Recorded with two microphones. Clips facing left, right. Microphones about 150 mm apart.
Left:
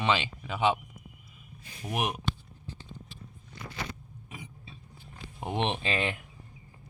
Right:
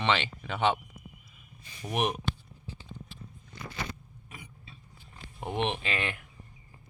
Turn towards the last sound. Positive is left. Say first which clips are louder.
# left 2 dB
turn(degrees=25)  # may be behind; listen again after turning